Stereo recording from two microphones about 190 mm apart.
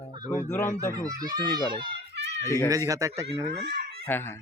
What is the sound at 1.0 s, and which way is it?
A child's voice, 20° right (ahead or behind).